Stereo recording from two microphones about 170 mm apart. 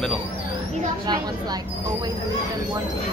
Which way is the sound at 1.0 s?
25° right (ahead or behind).